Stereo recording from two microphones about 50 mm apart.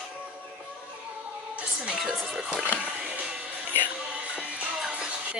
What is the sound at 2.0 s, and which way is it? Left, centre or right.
Speech, centre.